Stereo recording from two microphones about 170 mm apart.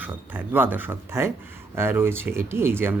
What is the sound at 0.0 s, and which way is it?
Speech, 10° right (ahead or behind).